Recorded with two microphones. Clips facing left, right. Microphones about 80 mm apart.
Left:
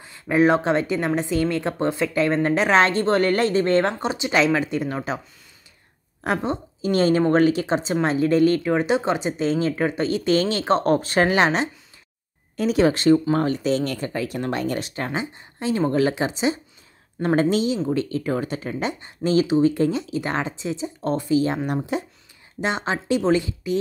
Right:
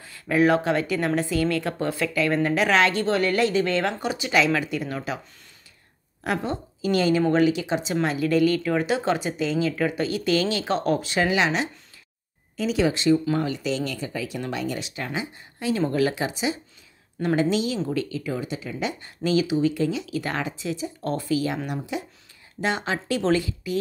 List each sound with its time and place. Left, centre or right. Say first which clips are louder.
0.0 s a woman's voice: left 2 dB; left
6.2 s a woman's voice: left 3 dB; left
9.4 s a woman's voice: left 2 dB; left
15.0 s a woman's voice: left 3 dB; left
18.9 s a woman's voice: left 3 dB; left
20.2 s a woman's voice: left 3 dB; left
21.9 s a woman's voice: left 2 dB; left
22.6 s a woman's voice: left 1 dB; left